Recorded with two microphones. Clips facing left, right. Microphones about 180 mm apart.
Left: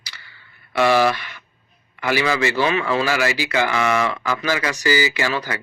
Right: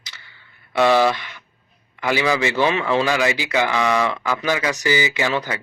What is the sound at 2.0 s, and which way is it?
A man's voice, 15° right (ahead or behind).